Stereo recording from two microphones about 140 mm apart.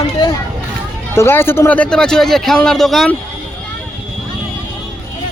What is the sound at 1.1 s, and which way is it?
Speech, 15° left (ahead or behind).